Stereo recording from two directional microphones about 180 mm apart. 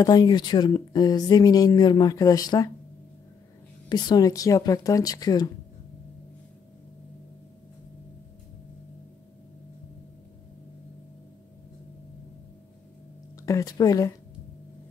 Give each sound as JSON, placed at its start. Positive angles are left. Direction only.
{"t": 0.0, "sound": "speech", "side_deg": 25}
{"t": 3.9, "sound": "speech", "side_deg": 20}
{"t": 13.4, "sound": "speech", "side_deg": 20}